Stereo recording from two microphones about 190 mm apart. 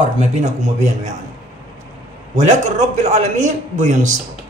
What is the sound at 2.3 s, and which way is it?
Speech, 35° right (ahead or behind).